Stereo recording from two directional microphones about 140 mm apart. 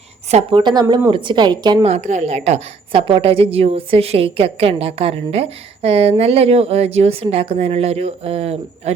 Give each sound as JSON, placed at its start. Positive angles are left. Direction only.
{"t": 0.3, "sound": "a woman's voice", "side_deg": -50}
{"t": 0.6, "sound": "a woman's voice", "side_deg": -30}
{"t": 1.9, "sound": "a woman's voice", "side_deg": -60}